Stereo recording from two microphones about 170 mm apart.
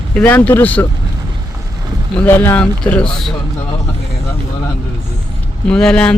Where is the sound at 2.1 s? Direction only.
10° left (ahead or behind).